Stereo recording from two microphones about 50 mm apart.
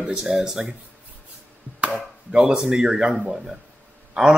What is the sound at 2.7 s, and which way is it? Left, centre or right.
Speech, centre.